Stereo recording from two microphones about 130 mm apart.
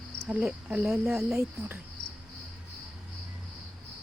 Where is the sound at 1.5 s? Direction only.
15° right (ahead or behind).